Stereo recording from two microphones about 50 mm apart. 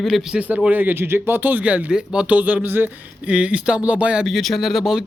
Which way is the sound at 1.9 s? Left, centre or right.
Centre.